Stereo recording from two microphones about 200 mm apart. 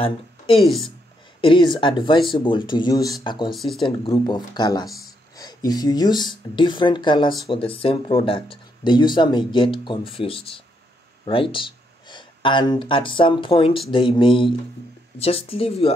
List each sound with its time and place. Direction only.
0.0 s speech: 25° left (ahead or behind)
0.7 s speech: centre (ahead or behind)
1.4 s speech: 25° left (ahead or behind)
3.4 s speech: centre (ahead or behind)
4.0 s speech: 25° left (ahead or behind)